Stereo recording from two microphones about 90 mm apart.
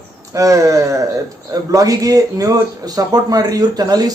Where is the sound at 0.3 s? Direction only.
40° right (ahead or behind).